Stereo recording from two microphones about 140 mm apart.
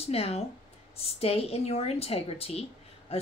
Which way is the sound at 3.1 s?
45° left (ahead or behind).